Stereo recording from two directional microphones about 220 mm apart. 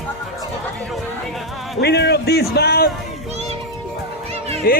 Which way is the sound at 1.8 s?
50° left (ahead or behind).